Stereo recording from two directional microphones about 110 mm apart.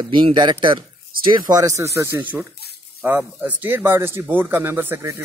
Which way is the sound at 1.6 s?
30° right (ahead or behind).